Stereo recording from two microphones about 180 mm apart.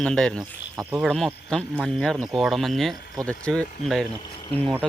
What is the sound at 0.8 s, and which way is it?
Speech, 5° right (ahead or behind).